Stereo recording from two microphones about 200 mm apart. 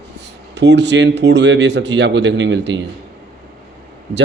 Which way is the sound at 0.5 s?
60° right (ahead or behind).